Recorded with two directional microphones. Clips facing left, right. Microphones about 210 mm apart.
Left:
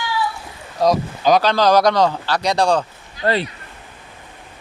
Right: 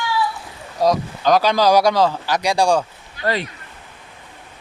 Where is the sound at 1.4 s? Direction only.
10° right (ahead or behind).